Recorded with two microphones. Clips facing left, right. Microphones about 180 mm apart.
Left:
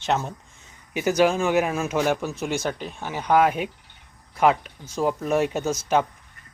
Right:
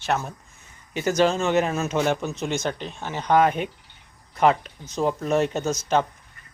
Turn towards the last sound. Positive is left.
turn(degrees=10)  # may be behind; listen again after turning